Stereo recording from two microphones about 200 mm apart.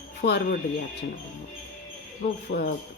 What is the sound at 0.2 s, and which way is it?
Speech, 50° left (ahead or behind).